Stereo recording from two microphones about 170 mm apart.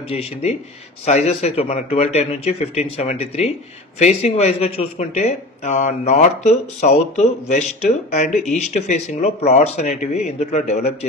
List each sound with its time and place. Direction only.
0.1 s speech: 40° left (ahead or behind)